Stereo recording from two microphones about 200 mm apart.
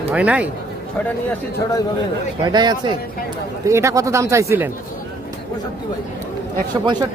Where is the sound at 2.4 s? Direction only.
20° right (ahead or behind).